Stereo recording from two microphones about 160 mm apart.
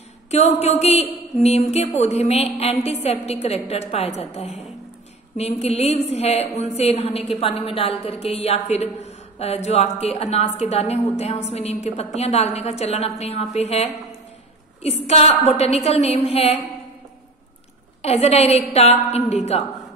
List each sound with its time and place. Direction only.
0.3 s a sound: 45° left (ahead or behind)
1.4 s a woman's voice: 40° left (ahead or behind)
18.0 s a woman's voice: 40° left (ahead or behind)